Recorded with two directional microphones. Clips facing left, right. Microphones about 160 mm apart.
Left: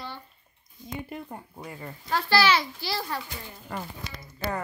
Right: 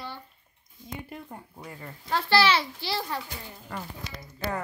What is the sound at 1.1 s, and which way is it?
Speech, 25° left (ahead or behind).